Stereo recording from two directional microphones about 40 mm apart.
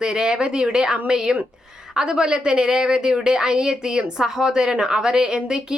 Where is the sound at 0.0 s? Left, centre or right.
Centre.